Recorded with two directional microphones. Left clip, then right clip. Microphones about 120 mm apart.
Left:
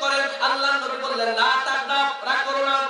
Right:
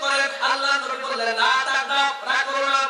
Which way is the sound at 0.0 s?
15° left (ahead or behind).